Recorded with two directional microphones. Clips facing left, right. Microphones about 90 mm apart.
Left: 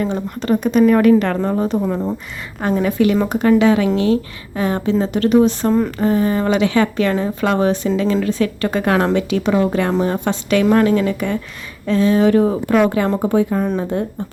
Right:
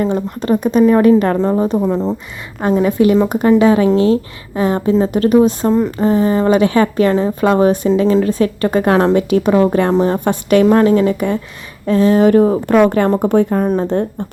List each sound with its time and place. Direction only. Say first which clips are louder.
0.6 s a woman's voice: right 2 dB; 35° right (ahead or behind)
9.3 s a woman's voice: right 4 dB; 45° right (ahead or behind)
10.2 s speech: right 5 dB; 45° right (ahead or behind)
10.7 s a woman's voice: right 3 dB; 30° right (ahead or behind); by 13.1 s 50° right (ahead or behind)
13.1 s speech: right 3 dB; 65° right (ahead or behind); by 13.8 s 50° right (ahead or behind)